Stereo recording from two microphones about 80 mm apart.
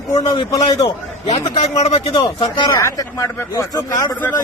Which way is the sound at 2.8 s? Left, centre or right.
Left.